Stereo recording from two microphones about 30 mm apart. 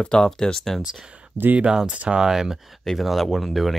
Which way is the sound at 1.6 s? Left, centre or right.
Right.